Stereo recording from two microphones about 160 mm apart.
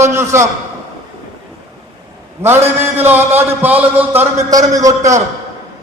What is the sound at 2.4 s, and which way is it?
A man's voice, 15° right (ahead or behind).